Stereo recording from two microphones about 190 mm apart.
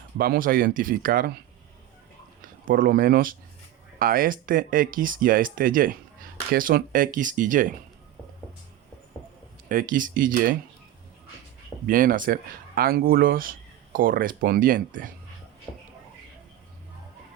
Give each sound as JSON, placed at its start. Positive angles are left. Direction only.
{"t": 0.2, "sound": "speech", "side_deg": -50}
{"t": 2.4, "sound": "speech", "side_deg": -45}
{"t": 9.6, "sound": "speech", "side_deg": -45}
{"t": 11.9, "sound": "speech", "side_deg": -45}